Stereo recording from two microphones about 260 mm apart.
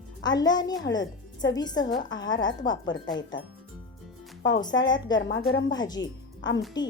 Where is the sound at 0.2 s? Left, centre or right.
Centre.